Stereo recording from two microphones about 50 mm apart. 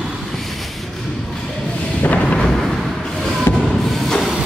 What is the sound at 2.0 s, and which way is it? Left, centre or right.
Thunder, left.